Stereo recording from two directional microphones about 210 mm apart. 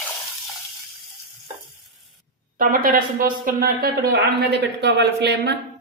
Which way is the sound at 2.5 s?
40° right (ahead or behind).